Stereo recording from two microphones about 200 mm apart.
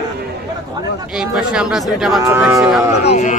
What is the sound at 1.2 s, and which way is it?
Speech, 5° right (ahead or behind).